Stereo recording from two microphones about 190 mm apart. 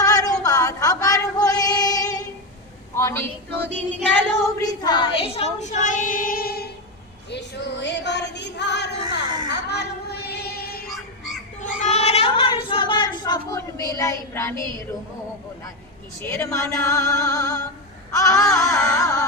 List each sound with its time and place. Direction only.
0.0 s a sound: 20° left (ahead or behind)
1.8 s female singing: 20° left (ahead or behind)
2.9 s a sound: 15° left (ahead or behind)
4.6 s child singing: 20° left (ahead or behind); by 6.7 s 55° left (ahead or behind)
7.3 s music: 65° left (ahead or behind)
10.8 s crow: centre (ahead or behind)
11.6 s a sound: 40° left (ahead or behind); by 14.6 s 15° left (ahead or behind)
16.2 s female singing: 15° left (ahead or behind)
18.7 s music: 15° left (ahead or behind)